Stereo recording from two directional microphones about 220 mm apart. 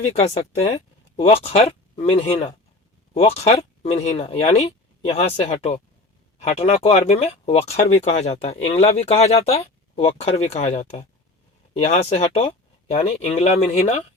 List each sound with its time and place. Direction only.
0.0 s speech: 30° left (ahead or behind)